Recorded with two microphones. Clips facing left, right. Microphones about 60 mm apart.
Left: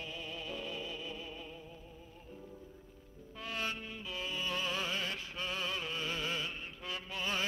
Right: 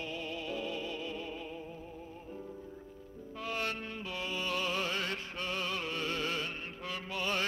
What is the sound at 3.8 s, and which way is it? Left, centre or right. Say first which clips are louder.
Music: right 4 dB; centre.